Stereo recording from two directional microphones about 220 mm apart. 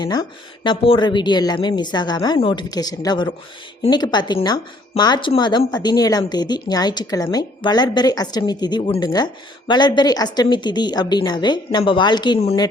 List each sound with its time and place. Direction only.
0.0 s speech: 20° left (ahead or behind)